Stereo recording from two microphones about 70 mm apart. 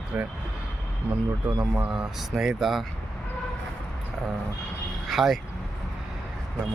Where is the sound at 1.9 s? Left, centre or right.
Centre.